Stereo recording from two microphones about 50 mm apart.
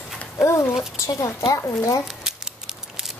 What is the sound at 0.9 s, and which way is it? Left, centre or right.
Speech, left.